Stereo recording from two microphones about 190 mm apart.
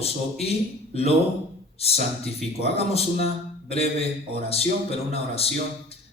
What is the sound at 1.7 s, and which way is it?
A man's voice, 30° left (ahead or behind).